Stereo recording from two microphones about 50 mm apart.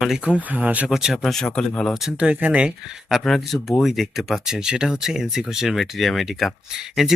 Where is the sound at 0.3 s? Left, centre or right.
Right.